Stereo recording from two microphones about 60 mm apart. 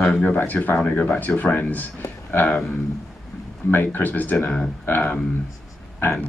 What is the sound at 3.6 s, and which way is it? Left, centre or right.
Speech, left.